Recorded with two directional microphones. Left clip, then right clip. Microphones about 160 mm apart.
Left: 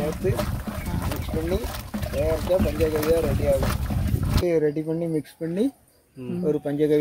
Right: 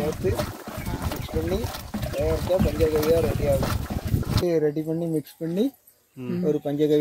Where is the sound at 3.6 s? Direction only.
20° left (ahead or behind).